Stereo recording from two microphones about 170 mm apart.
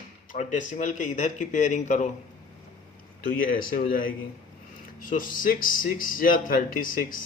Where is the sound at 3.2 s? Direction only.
55° left (ahead or behind).